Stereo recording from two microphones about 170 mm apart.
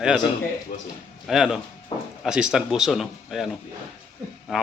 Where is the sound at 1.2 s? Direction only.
Centre (ahead or behind).